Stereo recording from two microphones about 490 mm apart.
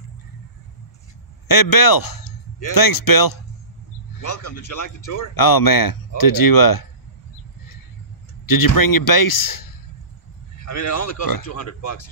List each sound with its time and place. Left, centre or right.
1.5 s speech: left
8.5 s speech: left